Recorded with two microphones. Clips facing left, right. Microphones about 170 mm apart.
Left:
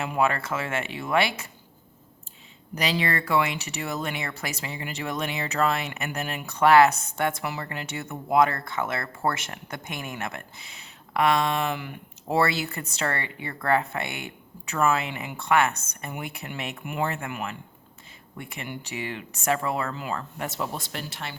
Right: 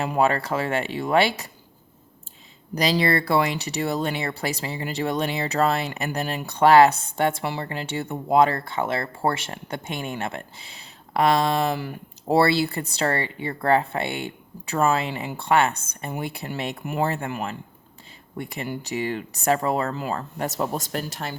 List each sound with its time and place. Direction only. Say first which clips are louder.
0.0 s speech: right 3 dB; 35° right (ahead or behind)
2.7 s speech: right 5 dB; 35° right (ahead or behind)